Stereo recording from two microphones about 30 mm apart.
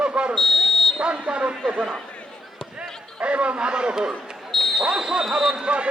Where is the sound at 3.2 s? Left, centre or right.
Right.